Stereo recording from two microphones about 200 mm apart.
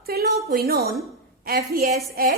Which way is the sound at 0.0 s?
50° right (ahead or behind).